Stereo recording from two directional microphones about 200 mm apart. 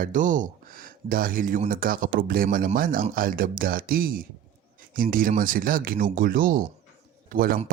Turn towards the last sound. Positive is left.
turn(degrees=-45)  # may be behind; listen again after turning